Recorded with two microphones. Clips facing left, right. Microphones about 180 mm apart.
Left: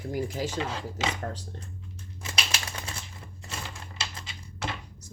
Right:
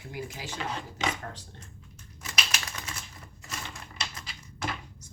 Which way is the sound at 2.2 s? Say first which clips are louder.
Left 1 dB; 30° left (ahead or behind).